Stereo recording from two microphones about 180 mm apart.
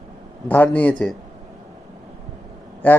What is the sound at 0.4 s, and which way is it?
Speech, 10° left (ahead or behind).